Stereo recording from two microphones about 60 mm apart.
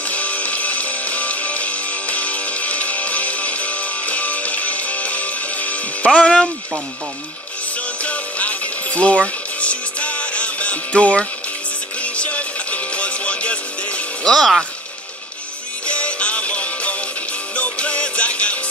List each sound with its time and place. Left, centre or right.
0.1 s music: left
8.0 s music: left
15.9 s music: centre